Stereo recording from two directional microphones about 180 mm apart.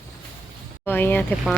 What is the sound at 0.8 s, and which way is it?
Speech, 10° left (ahead or behind).